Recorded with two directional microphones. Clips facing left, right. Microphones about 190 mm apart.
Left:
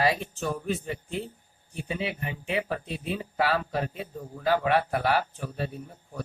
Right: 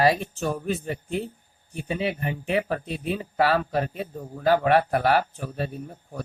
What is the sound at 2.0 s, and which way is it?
A man's voice, 50° right (ahead or behind).